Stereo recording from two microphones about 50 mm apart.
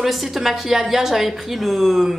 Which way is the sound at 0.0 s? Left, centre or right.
Centre.